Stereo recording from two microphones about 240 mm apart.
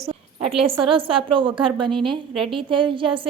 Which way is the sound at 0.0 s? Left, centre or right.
Right.